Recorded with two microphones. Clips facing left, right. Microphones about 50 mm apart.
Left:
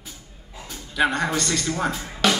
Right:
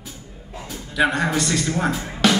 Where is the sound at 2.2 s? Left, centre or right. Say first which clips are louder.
Right 3 dB; centre.